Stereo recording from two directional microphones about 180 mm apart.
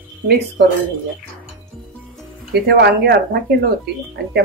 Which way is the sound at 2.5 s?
65° right (ahead or behind).